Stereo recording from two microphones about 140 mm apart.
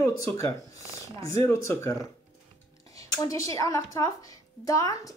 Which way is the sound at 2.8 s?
25° left (ahead or behind).